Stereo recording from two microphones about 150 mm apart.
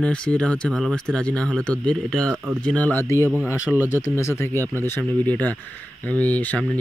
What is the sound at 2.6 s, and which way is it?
Speech, 10° left (ahead or behind).